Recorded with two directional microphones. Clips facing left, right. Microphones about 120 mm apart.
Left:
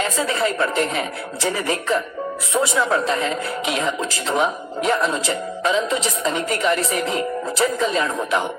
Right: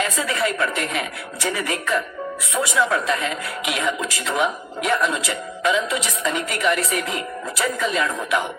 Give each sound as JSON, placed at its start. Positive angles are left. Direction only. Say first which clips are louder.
{"t": 0.0, "sound": "speech", "louder": "left 2 dB", "side_deg": 30}